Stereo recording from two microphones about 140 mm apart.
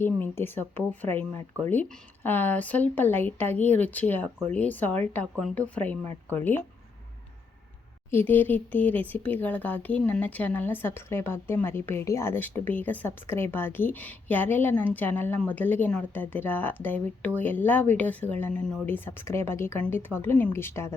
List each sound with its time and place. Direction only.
0.0 s speech: 15° left (ahead or behind)
8.1 s speech: 15° left (ahead or behind)